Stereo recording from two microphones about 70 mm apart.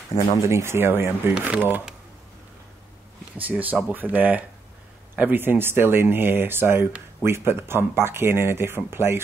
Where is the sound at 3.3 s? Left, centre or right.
Right.